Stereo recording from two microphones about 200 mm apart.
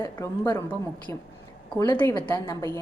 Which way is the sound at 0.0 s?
20° left (ahead or behind).